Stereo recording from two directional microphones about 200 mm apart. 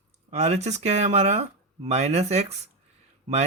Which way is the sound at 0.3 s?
35° right (ahead or behind).